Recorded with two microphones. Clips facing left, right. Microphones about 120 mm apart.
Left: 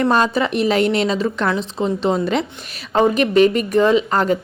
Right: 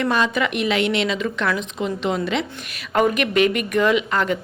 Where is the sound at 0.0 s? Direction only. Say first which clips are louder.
Left 4 dB; 35° left (ahead or behind).